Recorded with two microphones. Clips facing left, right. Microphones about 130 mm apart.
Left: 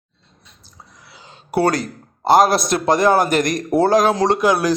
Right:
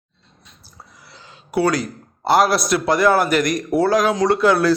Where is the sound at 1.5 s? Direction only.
50° left (ahead or behind).